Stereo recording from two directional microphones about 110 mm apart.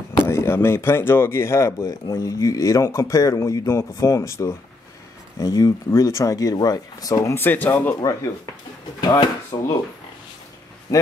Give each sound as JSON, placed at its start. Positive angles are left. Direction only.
{"t": 0.3, "sound": "speech", "side_deg": 25}
{"t": 8.0, "sound": "speech", "side_deg": 30}
{"t": 9.0, "sound": "speech", "side_deg": 40}